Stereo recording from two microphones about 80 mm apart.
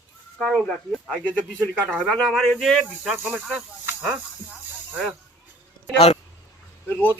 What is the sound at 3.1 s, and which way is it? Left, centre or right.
Speech, right.